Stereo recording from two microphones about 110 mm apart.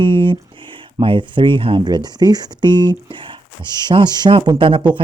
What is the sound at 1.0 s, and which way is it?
Speech, 50° right (ahead or behind).